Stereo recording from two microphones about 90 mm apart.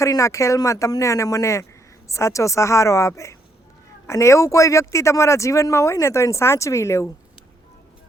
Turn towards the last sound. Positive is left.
turn(degrees=30)  # may be behind; listen again after turning